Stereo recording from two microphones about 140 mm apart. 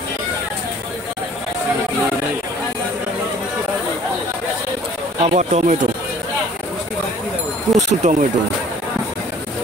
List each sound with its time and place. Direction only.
5.2 s speech: 55° right (ahead or behind)
7.7 s speech: 60° right (ahead or behind)